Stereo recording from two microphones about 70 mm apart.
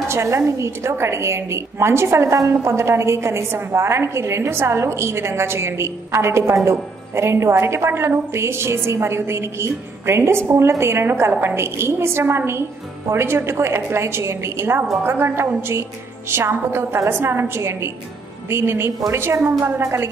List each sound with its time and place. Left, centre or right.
0.1 s a woman's voice: right